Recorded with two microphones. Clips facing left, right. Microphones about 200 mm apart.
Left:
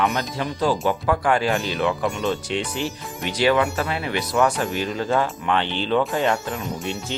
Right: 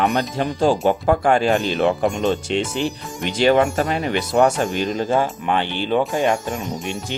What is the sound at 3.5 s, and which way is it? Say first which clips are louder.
Speech: right 4 dB; 45° right (ahead or behind).